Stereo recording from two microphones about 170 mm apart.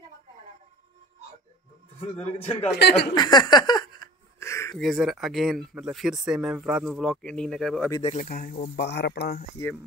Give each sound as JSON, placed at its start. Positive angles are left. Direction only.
{"t": 2.0, "sound": "a man's voice", "side_deg": 35}
{"t": 2.7, "sound": "speech", "side_deg": 75}
{"t": 3.2, "sound": "a sound", "side_deg": 25}
{"t": 4.7, "sound": "speech", "side_deg": 0}
{"t": 8.0, "sound": "a man's voice", "side_deg": 40}
{"t": 8.3, "sound": "speech", "side_deg": 55}
{"t": 8.7, "sound": "speech", "side_deg": 80}